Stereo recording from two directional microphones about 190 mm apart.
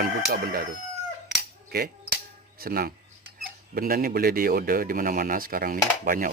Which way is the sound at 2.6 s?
50° right (ahead or behind).